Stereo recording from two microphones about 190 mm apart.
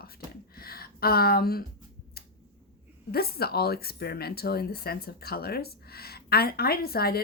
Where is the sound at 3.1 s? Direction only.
55° left (ahead or behind).